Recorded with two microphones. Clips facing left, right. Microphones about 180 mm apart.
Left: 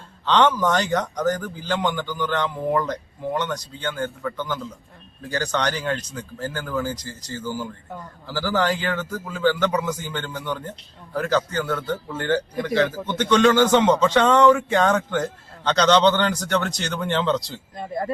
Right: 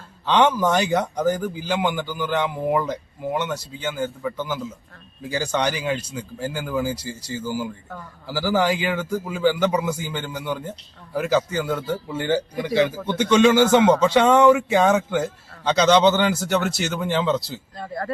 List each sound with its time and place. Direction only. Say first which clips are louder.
0.3 s a man's voice: right 1 dB; 10° right (ahead or behind)
17.7 s speech: left 3 dB; 20° left (ahead or behind)